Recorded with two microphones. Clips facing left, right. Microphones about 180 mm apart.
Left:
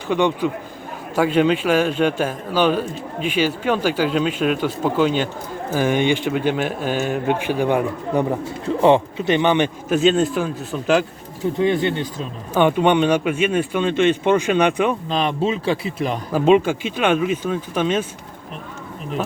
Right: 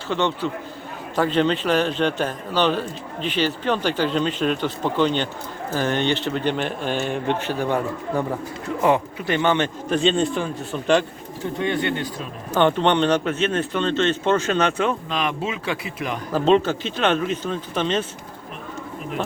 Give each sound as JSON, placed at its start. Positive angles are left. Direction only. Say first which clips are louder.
{"t": 0.1, "sound": "a man's voice", "louder": "left 4 dB", "side_deg": 10}
{"t": 8.8, "sound": "a man's voice", "louder": "left 5 dB", "side_deg": 25}
{"t": 10.0, "sound": "a man's voice", "louder": "left 4 dB", "side_deg": 5}
{"t": 11.6, "sound": "a man's voice", "louder": "left 4 dB", "side_deg": 25}
{"t": 12.5, "sound": "a man's voice", "louder": "left 2 dB", "side_deg": 10}
{"t": 15.1, "sound": "speech", "louder": "left 5 dB", "side_deg": 30}
{"t": 16.3, "sound": "a man's voice", "louder": "left 2 dB", "side_deg": 10}